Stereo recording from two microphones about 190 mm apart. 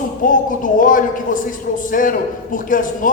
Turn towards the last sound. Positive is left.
turn(degrees=45)  # may be behind; listen again after turning